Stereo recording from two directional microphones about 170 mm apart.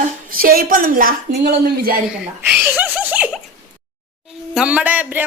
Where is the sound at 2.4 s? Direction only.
10° right (ahead or behind).